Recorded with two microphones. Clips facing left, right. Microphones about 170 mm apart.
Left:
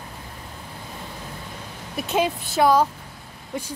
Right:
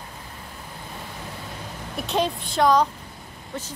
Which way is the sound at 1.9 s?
5° left (ahead or behind).